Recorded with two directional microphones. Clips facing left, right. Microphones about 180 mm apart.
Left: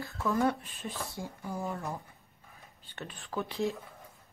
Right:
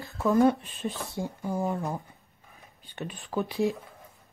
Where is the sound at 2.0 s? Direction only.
15° right (ahead or behind).